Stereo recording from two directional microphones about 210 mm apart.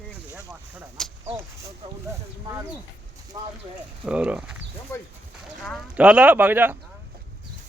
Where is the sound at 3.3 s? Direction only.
20° right (ahead or behind).